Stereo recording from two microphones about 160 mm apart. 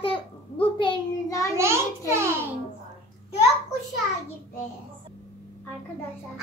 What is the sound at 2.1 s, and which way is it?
Music, 15° right (ahead or behind).